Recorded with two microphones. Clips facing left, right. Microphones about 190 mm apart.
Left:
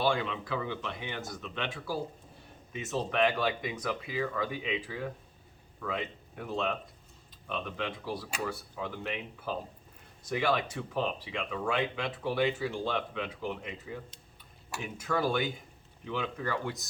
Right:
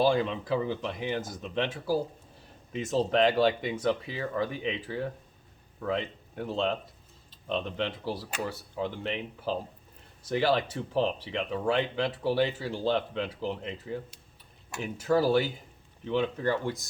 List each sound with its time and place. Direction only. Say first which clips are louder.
0.0 s speech: right 5 dB; 35° right (ahead or behind)